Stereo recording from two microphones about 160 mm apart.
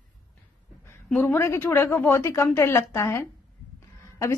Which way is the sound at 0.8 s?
15° left (ahead or behind).